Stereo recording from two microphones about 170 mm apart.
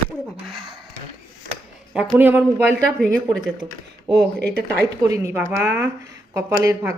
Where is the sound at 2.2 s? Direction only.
10° right (ahead or behind).